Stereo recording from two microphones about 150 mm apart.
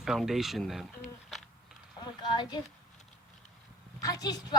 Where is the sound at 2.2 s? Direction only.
30° left (ahead or behind).